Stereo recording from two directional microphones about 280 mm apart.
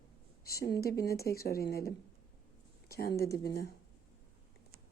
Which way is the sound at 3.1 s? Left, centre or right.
Centre.